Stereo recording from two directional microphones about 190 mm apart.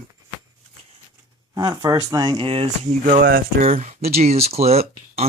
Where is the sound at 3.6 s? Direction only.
35° right (ahead or behind).